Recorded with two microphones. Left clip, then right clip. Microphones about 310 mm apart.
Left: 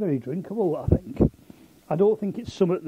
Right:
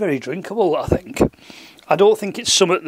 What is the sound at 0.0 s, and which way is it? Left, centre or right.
Speech, centre.